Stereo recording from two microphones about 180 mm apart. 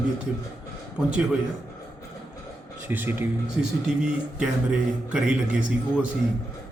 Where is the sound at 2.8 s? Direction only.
10° right (ahead or behind).